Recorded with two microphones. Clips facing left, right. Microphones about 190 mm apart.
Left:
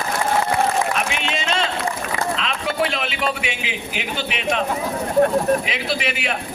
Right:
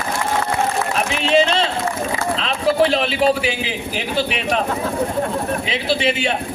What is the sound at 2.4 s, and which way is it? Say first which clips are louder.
A man's voice: right 6 dB; 35° right (ahead or behind).